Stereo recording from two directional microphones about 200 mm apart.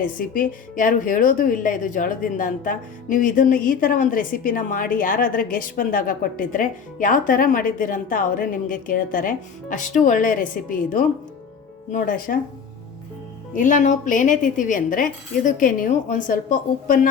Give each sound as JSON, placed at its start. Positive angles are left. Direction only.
{"t": 0.2, "sound": "a woman's voice", "side_deg": 45}
{"t": 13.6, "sound": "speech", "side_deg": 40}